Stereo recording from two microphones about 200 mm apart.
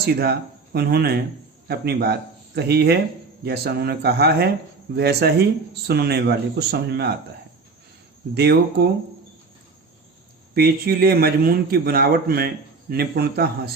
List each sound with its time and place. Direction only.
0.0 s a man's voice: 50° right (ahead or behind)
8.4 s a man's voice: 55° right (ahead or behind)
10.5 s a man's voice: 50° right (ahead or behind)